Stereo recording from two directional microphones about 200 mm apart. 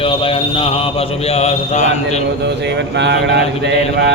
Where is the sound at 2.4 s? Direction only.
60° right (ahead or behind).